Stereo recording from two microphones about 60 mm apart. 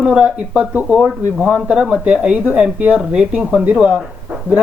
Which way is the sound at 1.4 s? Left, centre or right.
Centre.